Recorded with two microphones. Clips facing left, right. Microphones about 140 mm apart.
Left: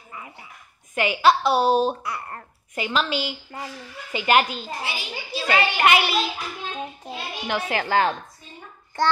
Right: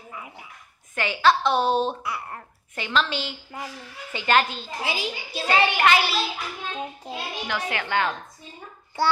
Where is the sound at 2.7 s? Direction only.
10° left (ahead or behind).